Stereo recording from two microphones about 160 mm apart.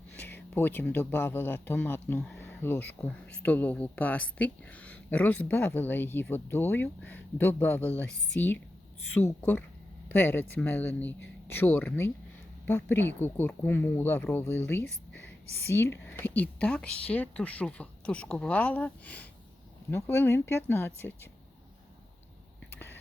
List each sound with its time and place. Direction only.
0.5 s speech: 10° left (ahead or behind)
10.1 s speech: 10° left (ahead or behind)
22.7 s a sound: 15° left (ahead or behind)